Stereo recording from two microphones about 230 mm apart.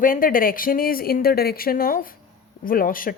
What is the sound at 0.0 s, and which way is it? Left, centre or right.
Speech, left.